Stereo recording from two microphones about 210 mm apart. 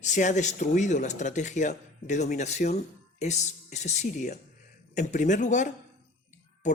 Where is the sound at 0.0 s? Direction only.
35° left (ahead or behind).